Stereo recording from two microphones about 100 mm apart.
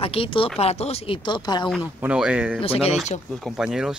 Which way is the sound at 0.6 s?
90° left.